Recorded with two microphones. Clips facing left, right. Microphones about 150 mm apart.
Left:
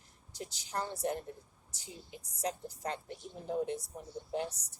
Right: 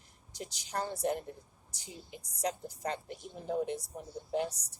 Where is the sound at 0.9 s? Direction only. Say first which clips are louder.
Right 2 dB; 20° right (ahead or behind).